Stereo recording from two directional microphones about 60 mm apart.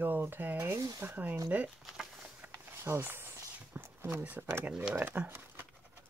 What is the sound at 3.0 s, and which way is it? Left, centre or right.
Speech, right.